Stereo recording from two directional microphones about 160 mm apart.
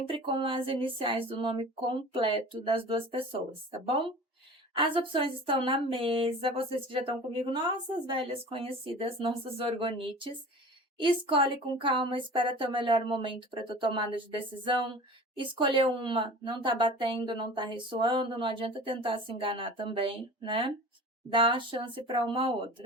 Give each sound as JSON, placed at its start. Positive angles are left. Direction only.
{"t": 0.1, "sound": "speech", "side_deg": -35}